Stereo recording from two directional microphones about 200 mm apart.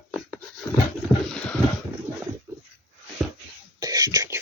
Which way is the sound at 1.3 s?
5° left (ahead or behind).